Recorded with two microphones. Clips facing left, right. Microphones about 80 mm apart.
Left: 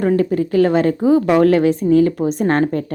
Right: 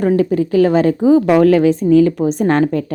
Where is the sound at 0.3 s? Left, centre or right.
Left.